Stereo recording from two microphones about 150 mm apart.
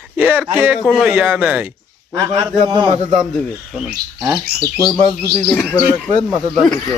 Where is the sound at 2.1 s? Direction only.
25° right (ahead or behind).